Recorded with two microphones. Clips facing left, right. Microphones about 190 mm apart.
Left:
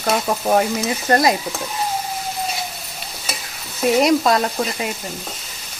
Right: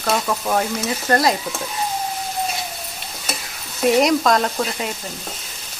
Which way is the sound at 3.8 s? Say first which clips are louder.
Even; centre (ahead or behind).